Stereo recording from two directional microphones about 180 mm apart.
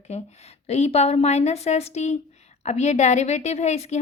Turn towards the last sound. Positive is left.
turn(degrees=40)  # may be behind; listen again after turning